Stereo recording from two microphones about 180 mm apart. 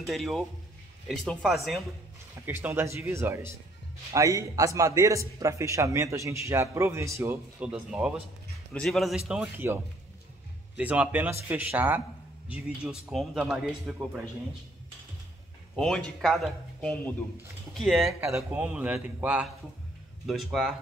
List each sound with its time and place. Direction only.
0.0 s speech: centre (ahead or behind)
2.4 s a man's voice: 10° right (ahead or behind)
9.3 s a man's voice: 10° right (ahead or behind)
10.8 s a man's voice: 10° right (ahead or behind)
15.7 s a man's voice: 5° left (ahead or behind)